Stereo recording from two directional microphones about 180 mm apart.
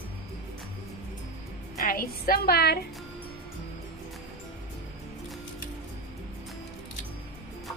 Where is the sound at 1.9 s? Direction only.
55° left (ahead or behind).